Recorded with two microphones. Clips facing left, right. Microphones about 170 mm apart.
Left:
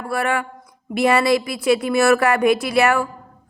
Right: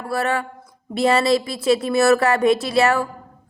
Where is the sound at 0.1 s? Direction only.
25° right (ahead or behind).